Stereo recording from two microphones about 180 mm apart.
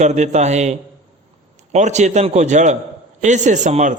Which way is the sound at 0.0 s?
40° right (ahead or behind).